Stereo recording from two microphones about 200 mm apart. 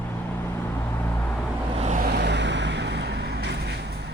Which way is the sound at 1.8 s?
35° right (ahead or behind).